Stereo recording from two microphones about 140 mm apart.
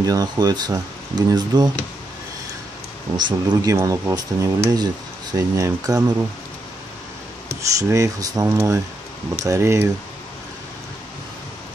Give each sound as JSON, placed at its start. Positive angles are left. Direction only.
{"t": 0.0, "sound": "speech", "side_deg": -25}
{"t": 3.2, "sound": "speech", "side_deg": -30}
{"t": 3.7, "sound": "speech", "side_deg": -20}
{"t": 7.9, "sound": "speech", "side_deg": -25}